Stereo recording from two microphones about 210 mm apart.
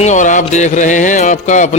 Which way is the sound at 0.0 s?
35° left (ahead or behind).